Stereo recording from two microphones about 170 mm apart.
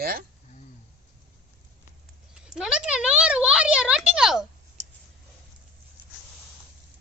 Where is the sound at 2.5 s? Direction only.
5° right (ahead or behind).